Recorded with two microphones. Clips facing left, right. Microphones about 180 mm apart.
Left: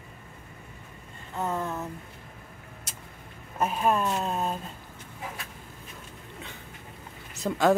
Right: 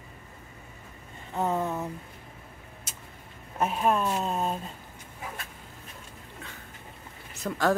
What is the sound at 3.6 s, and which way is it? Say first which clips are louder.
Speech: even; centre (ahead or behind).